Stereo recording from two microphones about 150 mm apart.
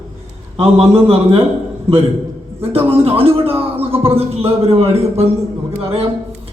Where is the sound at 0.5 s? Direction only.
40° right (ahead or behind).